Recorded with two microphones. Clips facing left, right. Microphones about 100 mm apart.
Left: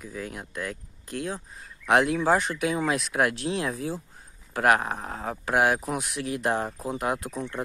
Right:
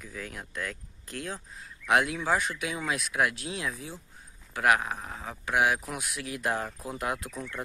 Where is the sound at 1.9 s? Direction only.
35° left (ahead or behind).